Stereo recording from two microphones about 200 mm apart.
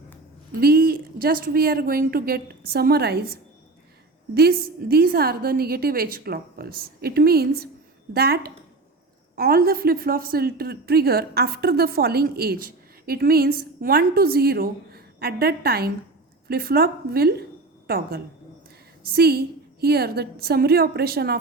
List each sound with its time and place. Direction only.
0.6 s a woman's voice: 50° right (ahead or behind)
4.4 s a woman's voice: 50° right (ahead or behind)